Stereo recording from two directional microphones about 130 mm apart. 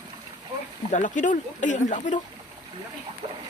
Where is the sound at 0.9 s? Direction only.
75° left (ahead or behind).